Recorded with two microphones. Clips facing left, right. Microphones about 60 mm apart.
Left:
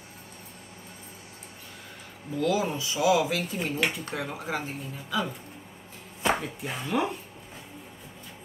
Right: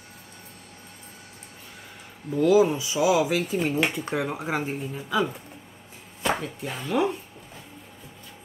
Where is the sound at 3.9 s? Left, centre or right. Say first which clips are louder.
Right 6 dB; right.